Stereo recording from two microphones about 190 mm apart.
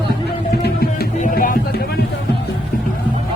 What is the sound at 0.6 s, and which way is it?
Music, 55° left (ahead or behind).